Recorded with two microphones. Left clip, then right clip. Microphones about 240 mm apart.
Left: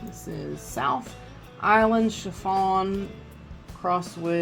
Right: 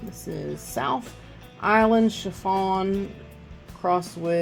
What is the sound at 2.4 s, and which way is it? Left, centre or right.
Speech, right.